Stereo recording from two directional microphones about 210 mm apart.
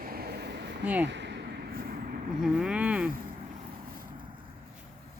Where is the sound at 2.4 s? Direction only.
Centre (ahead or behind).